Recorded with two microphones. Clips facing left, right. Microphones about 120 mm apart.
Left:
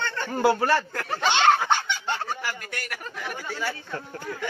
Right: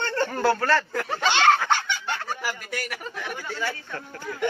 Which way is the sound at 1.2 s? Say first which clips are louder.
Even; 15° left (ahead or behind).